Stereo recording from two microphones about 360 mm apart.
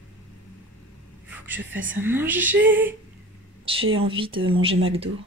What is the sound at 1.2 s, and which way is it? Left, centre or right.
A woman's voice, centre.